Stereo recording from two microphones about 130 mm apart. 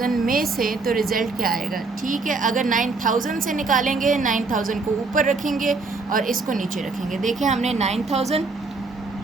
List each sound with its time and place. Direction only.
0.0 s a woman's voice: 90° right
7.2 s speech: 70° right (ahead or behind); by 8.4 s 55° right (ahead or behind)